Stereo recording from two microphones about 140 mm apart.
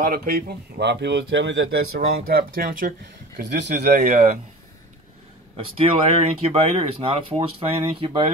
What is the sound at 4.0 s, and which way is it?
Speech, 55° right (ahead or behind).